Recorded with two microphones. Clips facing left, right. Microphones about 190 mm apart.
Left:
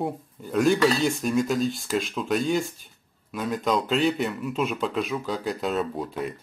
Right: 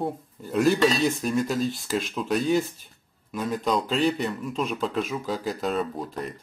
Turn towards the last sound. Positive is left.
turn(degrees=0)  # may be behind; listen again after turning